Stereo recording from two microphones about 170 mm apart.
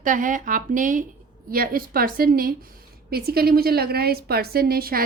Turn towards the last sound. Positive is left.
turn(degrees=-60)  # may be behind; listen again after turning